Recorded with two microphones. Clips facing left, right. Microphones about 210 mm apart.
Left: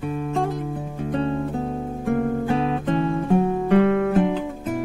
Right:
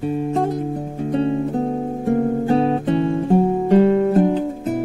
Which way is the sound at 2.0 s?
30° right (ahead or behind).